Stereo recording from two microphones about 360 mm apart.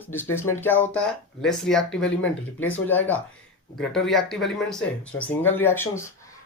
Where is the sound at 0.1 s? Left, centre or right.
Centre.